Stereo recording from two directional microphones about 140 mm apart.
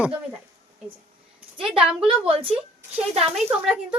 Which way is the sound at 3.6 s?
5° right (ahead or behind).